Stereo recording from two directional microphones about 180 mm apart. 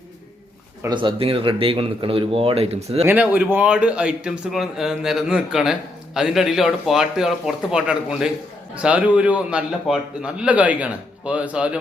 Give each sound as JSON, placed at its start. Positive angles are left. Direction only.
{"t": 0.8, "sound": "speech", "side_deg": -25}
{"t": 3.1, "sound": "a man's voice", "side_deg": -10}